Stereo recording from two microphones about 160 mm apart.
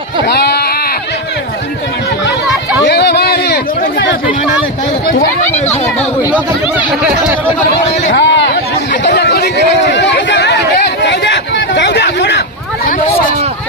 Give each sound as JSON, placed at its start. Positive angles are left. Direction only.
{"t": 0.3, "sound": "sheep", "side_deg": 90}
{"t": 2.8, "sound": "a sound", "side_deg": 90}
{"t": 6.3, "sound": "speech", "side_deg": -10}
{"t": 8.1, "sound": "chatter", "side_deg": 90}